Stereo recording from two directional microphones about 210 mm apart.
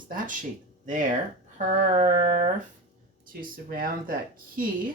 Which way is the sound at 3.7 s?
40° right (ahead or behind).